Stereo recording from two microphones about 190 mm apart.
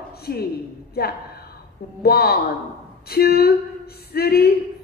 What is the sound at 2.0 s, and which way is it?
A woman's voice, 55° left (ahead or behind).